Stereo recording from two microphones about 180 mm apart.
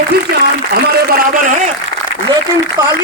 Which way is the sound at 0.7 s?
60° right (ahead or behind).